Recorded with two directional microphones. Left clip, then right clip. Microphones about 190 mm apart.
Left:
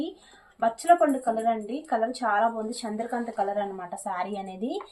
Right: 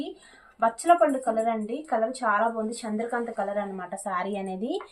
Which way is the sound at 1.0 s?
Centre (ahead or behind).